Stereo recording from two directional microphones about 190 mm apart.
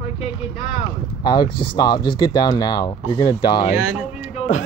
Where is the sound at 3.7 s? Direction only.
5° right (ahead or behind).